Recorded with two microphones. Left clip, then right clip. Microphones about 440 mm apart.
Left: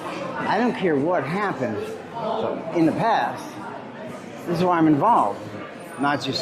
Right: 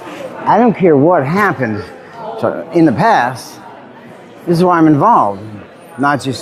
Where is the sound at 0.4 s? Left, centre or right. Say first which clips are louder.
Right 13 dB; right.